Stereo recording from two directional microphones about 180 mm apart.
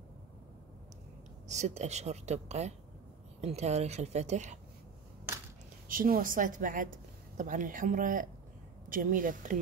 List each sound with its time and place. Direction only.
1.5 s speech: 40° right (ahead or behind)
5.9 s a woman's voice: 50° right (ahead or behind)